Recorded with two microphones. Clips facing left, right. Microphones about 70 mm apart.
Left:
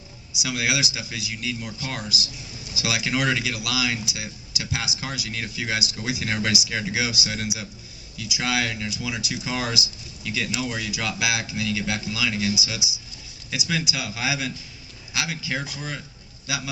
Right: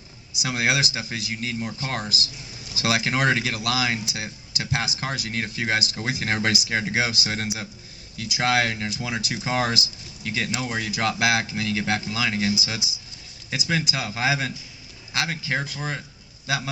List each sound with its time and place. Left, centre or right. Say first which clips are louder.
0.4 s speech: right 2 dB; right